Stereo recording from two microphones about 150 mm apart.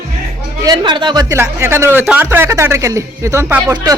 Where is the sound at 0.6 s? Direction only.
30° right (ahead or behind).